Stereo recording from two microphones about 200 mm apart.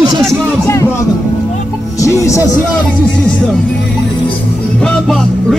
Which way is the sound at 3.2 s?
5° left (ahead or behind).